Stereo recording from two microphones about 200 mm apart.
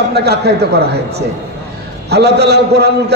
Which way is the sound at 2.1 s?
55° right (ahead or behind).